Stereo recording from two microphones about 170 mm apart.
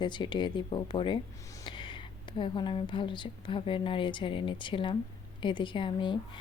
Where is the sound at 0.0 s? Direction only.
25° left (ahead or behind).